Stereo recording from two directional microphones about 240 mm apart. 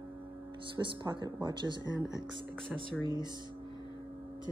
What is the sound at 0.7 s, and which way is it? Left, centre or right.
Speech, centre.